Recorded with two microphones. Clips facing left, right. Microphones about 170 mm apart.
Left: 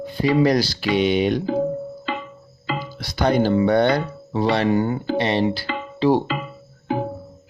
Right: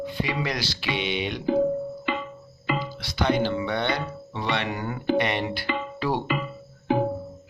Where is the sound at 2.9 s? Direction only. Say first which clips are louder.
Left 6 dB; 45° left (ahead or behind).